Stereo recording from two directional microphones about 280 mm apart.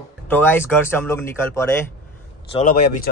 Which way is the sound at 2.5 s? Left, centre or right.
Left.